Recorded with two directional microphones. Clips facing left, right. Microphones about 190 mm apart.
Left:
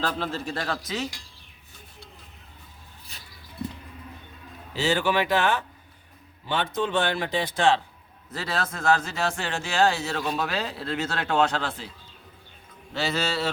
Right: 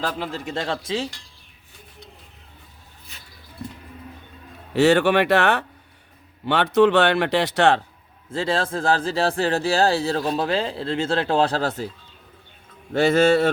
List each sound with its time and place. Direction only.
0.0 s speech: 15° right (ahead or behind)
4.7 s a man's voice: 65° right (ahead or behind)
8.3 s a man's voice: 25° right (ahead or behind)
12.9 s speech: 50° right (ahead or behind)